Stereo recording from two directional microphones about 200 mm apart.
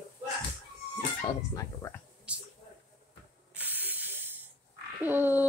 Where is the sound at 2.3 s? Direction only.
5° right (ahead or behind).